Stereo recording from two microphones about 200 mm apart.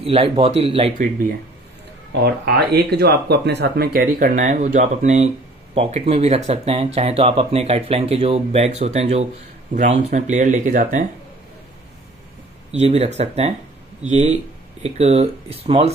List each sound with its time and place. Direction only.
0.0 s speech: 30° right (ahead or behind)
2.2 s speech: 55° right (ahead or behind)
12.7 s speech: 30° right (ahead or behind)